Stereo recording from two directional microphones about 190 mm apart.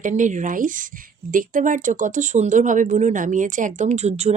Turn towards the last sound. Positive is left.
turn(degrees=-35)  # may be behind; listen again after turning